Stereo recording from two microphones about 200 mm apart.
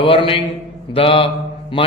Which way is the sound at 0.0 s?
25° left (ahead or behind).